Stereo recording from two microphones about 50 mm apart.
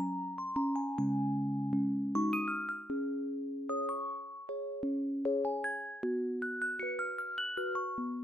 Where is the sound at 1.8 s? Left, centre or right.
Left.